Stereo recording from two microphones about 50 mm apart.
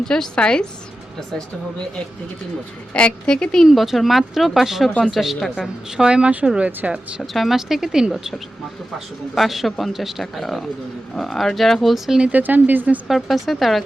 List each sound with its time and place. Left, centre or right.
0.0 s speech: centre
2.9 s speech: left
3.7 s speech: centre
5.6 s a woman's voice: centre
6.7 s speech: right
7.3 s a woman's voice: centre
9.3 s speech: centre
12.3 s speech: right
13.1 s speech: centre